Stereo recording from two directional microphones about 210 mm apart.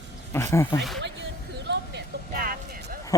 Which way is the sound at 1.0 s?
55° right (ahead or behind).